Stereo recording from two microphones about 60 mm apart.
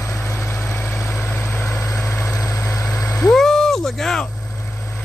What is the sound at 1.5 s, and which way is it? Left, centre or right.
Vehicle, left.